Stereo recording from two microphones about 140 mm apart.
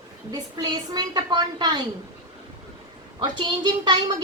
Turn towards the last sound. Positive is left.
turn(degrees=-30)  # may be behind; listen again after turning